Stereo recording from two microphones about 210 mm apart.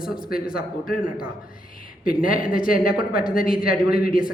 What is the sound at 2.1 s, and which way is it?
Speech, 40° left (ahead or behind).